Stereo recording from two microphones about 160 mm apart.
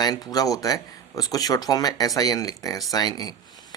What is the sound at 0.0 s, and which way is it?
Speech, 25° left (ahead or behind).